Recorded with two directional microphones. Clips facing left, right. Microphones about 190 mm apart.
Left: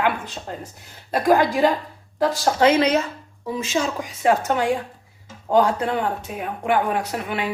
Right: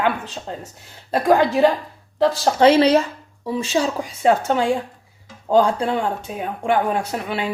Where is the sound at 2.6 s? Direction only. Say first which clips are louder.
Right 4 dB; 30° right (ahead or behind).